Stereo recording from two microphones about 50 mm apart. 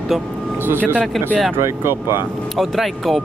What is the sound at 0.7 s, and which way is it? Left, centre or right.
Speech, right.